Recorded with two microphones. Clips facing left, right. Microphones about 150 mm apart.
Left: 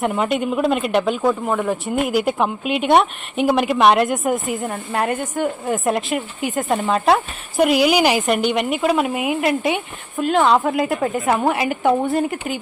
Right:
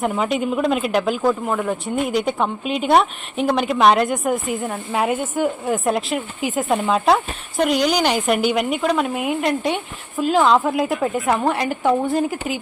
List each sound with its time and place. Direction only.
0.0 s speech: centre (ahead or behind)